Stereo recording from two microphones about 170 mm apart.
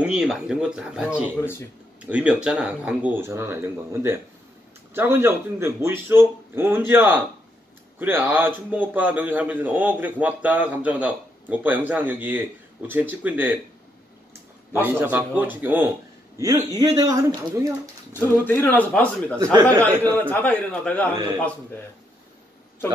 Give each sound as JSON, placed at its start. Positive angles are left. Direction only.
{"t": 0.0, "sound": "speech", "side_deg": -5}
{"t": 1.3, "sound": "a man's voice", "side_deg": 15}
{"t": 2.0, "sound": "a man's voice", "side_deg": -10}
{"t": 14.8, "sound": "a man's voice", "side_deg": -10}
{"t": 18.4, "sound": "a man's voice", "side_deg": 10}